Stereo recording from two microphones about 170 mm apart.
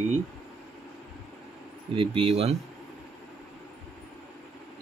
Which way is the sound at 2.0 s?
35° right (ahead or behind).